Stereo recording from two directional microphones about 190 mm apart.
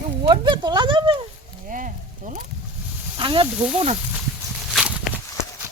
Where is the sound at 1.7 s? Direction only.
40° right (ahead or behind).